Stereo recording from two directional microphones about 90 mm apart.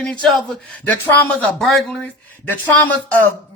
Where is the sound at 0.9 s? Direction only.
20° left (ahead or behind).